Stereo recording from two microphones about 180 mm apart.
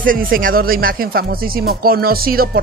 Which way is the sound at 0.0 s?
50° right (ahead or behind).